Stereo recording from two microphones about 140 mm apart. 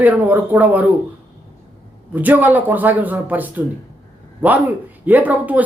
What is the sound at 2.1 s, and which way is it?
A woman's voice, 15° right (ahead or behind).